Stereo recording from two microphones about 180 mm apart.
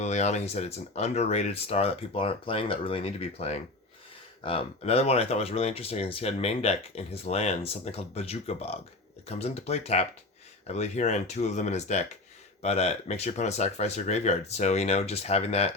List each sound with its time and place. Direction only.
0.0 s speech: 40° left (ahead or behind)